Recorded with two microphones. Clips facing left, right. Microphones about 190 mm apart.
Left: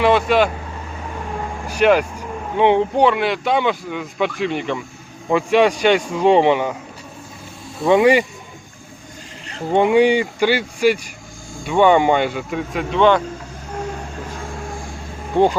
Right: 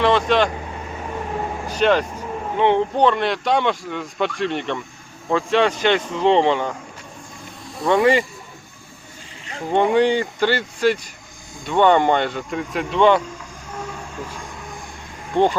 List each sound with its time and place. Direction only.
0.0 s speech: 5° left (ahead or behind)
1.6 s speech: 10° left (ahead or behind)
7.9 s speech: 20° left (ahead or behind)
9.7 s speech: 10° left (ahead or behind)
13.7 s train: 10° left (ahead or behind)
15.3 s speech: 10° left (ahead or behind)